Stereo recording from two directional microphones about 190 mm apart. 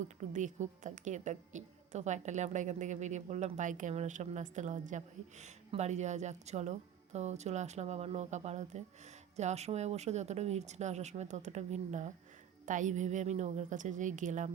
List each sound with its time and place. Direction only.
0.3 s a woman's voice: 40° right (ahead or behind)